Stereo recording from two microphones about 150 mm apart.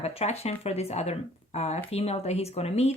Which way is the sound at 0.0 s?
45° left (ahead or behind).